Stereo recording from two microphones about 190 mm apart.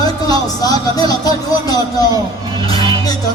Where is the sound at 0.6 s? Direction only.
20° left (ahead or behind).